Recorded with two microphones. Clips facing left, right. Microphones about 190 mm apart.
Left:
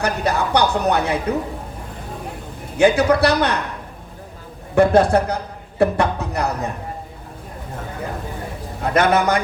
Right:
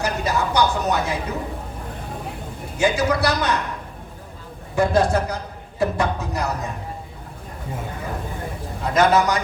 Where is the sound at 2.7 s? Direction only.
60° left (ahead or behind).